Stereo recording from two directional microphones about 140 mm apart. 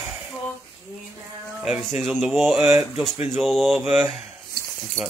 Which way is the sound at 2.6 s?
15° right (ahead or behind).